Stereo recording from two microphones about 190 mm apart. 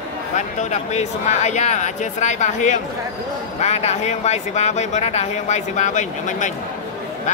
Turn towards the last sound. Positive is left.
turn(degrees=40)  # may be behind; listen again after turning